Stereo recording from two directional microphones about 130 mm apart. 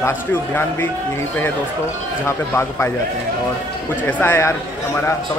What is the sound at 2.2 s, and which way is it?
Speech, 20° left (ahead or behind).